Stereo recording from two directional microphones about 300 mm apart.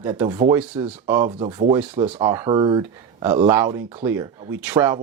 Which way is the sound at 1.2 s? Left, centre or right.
Centre.